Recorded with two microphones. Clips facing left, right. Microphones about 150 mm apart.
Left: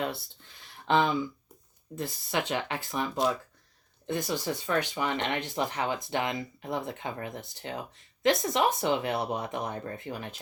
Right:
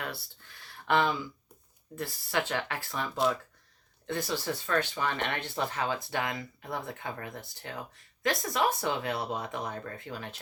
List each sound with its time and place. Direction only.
0.0 s speech: 20° left (ahead or behind)